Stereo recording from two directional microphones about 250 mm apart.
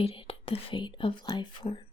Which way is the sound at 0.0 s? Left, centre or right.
Left.